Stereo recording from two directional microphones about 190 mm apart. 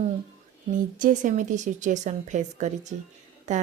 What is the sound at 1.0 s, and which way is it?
A woman's voice, 40° right (ahead or behind).